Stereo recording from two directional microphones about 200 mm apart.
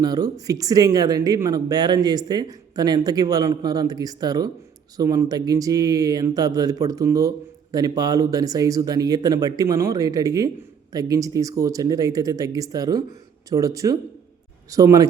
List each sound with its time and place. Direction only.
0.0 s speech: 20° right (ahead or behind)